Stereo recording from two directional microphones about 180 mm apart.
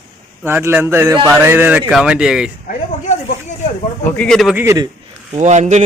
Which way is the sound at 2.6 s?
50° left (ahead or behind).